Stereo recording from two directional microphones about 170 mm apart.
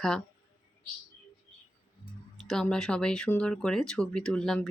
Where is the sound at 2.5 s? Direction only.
5° left (ahead or behind).